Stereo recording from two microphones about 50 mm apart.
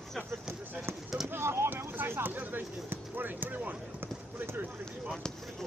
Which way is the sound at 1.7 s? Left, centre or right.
Right.